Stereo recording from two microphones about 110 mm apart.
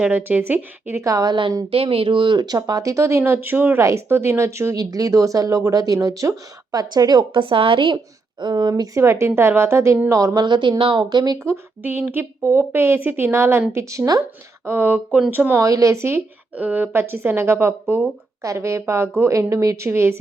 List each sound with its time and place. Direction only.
0.0 s speech: 15° right (ahead or behind)
1.0 s speech: 35° right (ahead or behind)
1.7 s speech: 60° right (ahead or behind); by 8.9 s 40° right (ahead or behind)
9.0 s a woman's voice: 25° right (ahead or behind)
11.4 s a woman's voice: 20° right (ahead or behind)
15.6 s a woman's voice: 30° right (ahead or behind)